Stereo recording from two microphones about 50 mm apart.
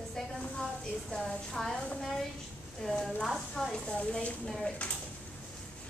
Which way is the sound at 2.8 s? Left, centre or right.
Centre.